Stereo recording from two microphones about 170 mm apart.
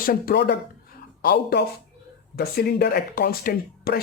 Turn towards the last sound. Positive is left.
turn(degrees=60)  # may be behind; listen again after turning